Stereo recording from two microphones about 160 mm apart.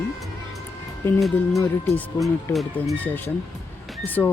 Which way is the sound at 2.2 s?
Centre (ahead or behind).